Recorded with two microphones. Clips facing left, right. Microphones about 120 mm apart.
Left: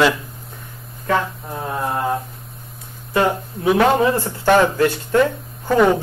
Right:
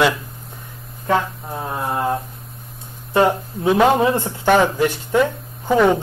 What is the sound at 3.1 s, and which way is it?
Speech, 25° right (ahead or behind).